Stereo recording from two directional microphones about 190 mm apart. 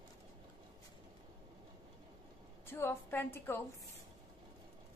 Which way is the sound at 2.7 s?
10° left (ahead or behind).